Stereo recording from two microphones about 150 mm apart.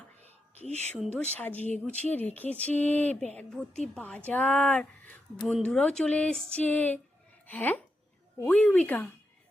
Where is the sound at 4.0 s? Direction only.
10° left (ahead or behind).